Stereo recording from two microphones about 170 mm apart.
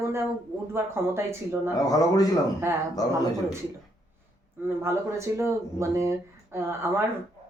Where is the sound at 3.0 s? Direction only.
20° left (ahead or behind).